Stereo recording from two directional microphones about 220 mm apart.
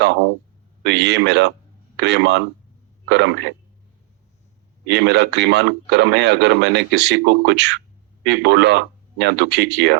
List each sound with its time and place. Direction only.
0.9 s speech: 50° right (ahead or behind)
4.9 s speech: 50° right (ahead or behind)